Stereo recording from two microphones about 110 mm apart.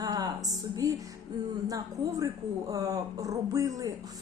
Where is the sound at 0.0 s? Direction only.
35° right (ahead or behind).